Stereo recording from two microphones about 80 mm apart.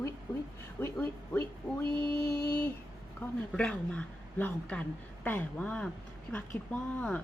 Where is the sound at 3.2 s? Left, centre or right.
Left.